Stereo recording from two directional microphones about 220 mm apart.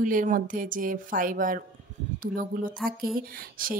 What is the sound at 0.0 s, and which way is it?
A woman's voice, 40° right (ahead or behind).